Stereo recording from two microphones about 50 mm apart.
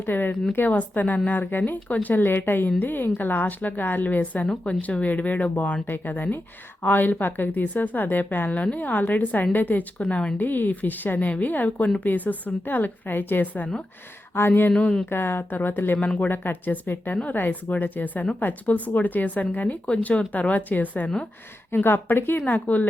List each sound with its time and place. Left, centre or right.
0.0 s speech: left
10.1 s speech: centre
10.3 s speech: left
21.7 s speech: left